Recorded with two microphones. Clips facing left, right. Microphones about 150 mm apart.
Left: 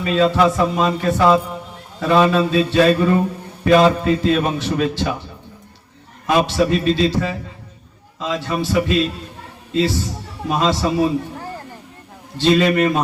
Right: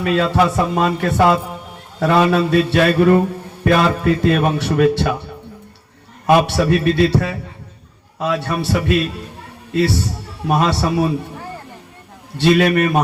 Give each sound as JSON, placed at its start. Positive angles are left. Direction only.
{"t": 0.0, "sound": "a man's voice", "side_deg": -60}
{"t": 12.4, "sound": "a man's voice", "side_deg": -60}